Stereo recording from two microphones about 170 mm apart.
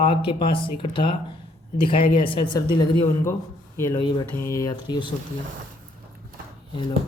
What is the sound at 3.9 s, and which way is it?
A woman's voice, 25° left (ahead or behind).